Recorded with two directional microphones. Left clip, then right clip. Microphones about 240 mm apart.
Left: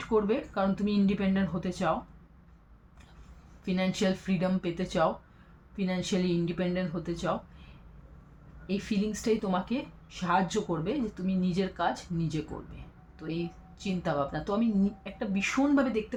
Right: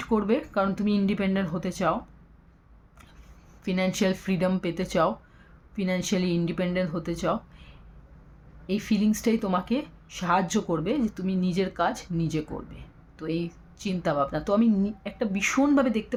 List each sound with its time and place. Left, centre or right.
0.1 s speech: right
3.7 s speech: right
8.6 s speech: right